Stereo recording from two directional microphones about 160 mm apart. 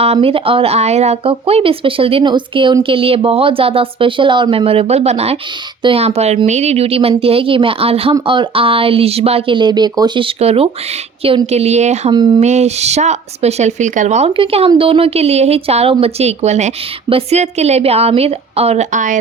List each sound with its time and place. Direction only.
0.0 s speech: 40° right (ahead or behind)
12.1 s speech: 25° right (ahead or behind)
12.4 s speech: 45° right (ahead or behind)
14.3 s speech: 35° right (ahead or behind)